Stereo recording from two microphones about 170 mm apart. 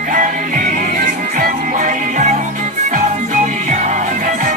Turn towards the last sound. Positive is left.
turn(degrees=-50)  # may be behind; listen again after turning